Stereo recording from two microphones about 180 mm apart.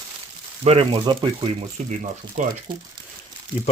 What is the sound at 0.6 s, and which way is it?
Speech, 30° right (ahead or behind).